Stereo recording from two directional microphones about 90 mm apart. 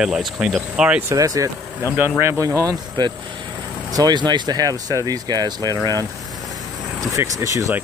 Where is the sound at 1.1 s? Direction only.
40° right (ahead or behind).